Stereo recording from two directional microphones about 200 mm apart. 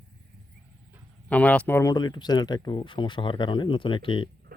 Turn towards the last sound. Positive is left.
turn(degrees=25)  # may be behind; listen again after turning